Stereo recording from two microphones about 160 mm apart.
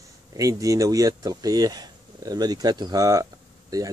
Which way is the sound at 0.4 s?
20° right (ahead or behind).